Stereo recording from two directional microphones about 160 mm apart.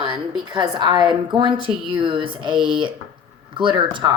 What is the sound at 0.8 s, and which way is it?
Speech, 30° right (ahead or behind).